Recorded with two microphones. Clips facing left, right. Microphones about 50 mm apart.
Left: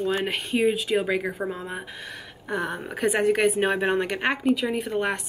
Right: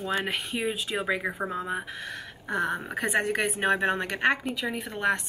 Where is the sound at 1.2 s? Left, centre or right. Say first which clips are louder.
Left 2 dB; centre.